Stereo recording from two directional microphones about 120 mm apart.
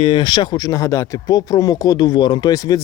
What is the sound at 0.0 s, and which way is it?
Speech, 40° left (ahead or behind).